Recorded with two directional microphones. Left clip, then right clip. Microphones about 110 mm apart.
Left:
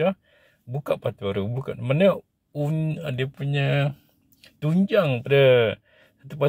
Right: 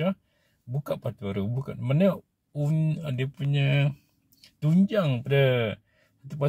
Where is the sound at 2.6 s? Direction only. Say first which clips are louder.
Right 1 dB; 25° right (ahead or behind).